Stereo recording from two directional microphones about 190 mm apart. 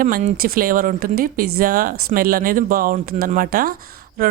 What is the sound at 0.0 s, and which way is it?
Speech, 45° right (ahead or behind).